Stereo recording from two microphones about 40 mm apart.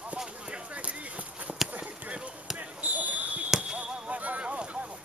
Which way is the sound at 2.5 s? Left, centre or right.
Right.